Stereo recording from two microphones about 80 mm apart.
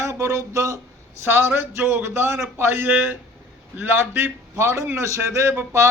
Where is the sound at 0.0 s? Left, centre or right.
Right.